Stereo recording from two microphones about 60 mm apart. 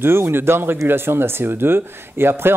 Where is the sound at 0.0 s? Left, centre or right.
Right.